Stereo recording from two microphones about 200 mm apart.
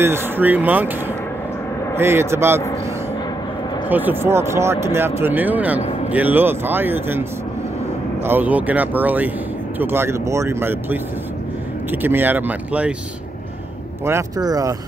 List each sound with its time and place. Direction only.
0.0 s speech: 10° right (ahead or behind)
2.0 s speech: 10° right (ahead or behind)
3.9 s speech: 10° right (ahead or behind)
14.0 s speech: 15° right (ahead or behind)